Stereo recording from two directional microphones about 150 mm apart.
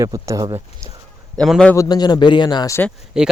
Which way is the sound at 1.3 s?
Centre (ahead or behind).